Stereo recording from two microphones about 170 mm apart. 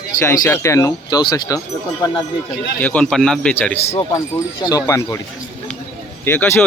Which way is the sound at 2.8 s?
10° left (ahead or behind).